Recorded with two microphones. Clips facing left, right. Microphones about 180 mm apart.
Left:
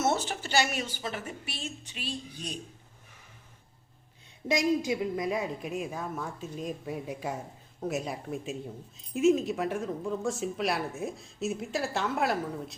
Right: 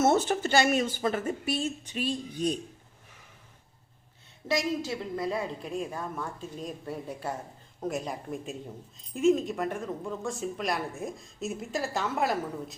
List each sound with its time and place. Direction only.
0.0 s speech: 50° right (ahead or behind)
4.4 s a woman's voice: 15° left (ahead or behind); by 12.3 s centre (ahead or behind)